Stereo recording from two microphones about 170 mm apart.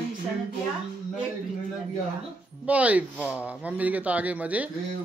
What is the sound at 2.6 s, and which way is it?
Speech, 10° right (ahead or behind).